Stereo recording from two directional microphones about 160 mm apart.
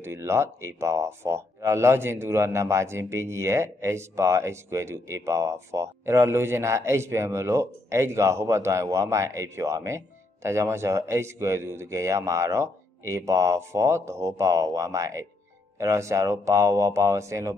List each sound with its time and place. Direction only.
0.0 s speech: 15° right (ahead or behind)